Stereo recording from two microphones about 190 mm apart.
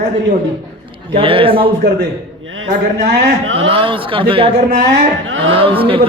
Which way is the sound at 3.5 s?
30° right (ahead or behind).